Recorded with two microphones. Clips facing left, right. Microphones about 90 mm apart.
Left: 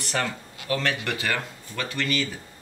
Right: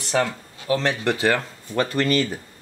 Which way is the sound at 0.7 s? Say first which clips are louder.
Right 4 dB; 30° right (ahead or behind).